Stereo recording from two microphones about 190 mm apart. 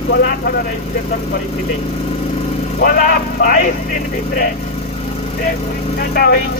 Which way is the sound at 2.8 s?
50° left (ahead or behind).